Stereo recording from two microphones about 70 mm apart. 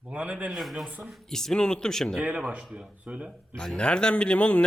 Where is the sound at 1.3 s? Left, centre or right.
Centre.